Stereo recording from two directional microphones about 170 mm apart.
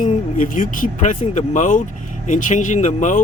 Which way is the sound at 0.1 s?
50° left (ahead or behind).